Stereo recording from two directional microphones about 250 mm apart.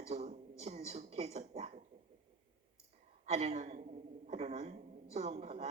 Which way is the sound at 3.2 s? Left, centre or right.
Right.